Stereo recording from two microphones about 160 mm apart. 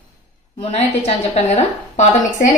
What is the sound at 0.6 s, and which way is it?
A woman's voice, 40° left (ahead or behind).